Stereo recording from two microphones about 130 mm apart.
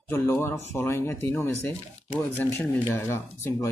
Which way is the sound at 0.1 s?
20° left (ahead or behind).